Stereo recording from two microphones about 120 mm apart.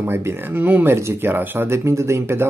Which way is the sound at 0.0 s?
20° right (ahead or behind).